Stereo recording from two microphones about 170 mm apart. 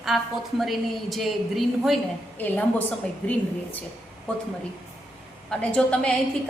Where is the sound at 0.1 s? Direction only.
5° right (ahead or behind).